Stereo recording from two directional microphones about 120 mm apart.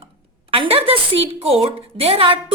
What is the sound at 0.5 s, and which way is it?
A woman's voice, 50° right (ahead or behind).